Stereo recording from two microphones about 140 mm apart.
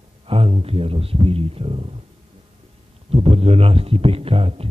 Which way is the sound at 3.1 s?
45° right (ahead or behind).